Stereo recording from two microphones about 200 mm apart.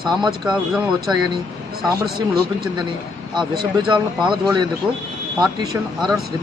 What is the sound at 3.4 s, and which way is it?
Speech, 25° right (ahead or behind).